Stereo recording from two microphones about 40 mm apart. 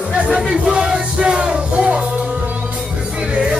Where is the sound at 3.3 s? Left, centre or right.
Centre.